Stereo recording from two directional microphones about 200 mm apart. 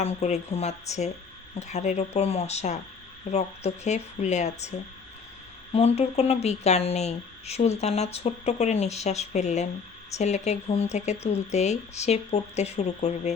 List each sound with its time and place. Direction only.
0.0 s speech: 35° left (ahead or behind)